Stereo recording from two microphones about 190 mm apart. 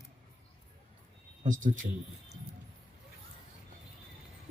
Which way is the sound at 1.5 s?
45° right (ahead or behind).